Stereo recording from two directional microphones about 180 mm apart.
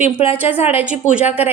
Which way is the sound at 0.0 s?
35° left (ahead or behind).